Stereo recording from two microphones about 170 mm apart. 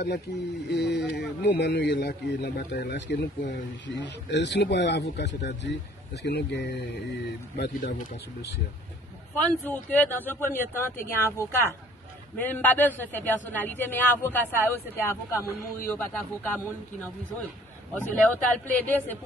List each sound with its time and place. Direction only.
0.7 s a man's voice: 75° left (ahead or behind)
6.2 s speech: 80° left
9.5 s a man's voice: 10° left (ahead or behind)